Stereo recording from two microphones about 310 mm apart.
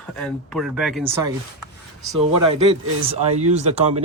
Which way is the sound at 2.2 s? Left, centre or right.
Right.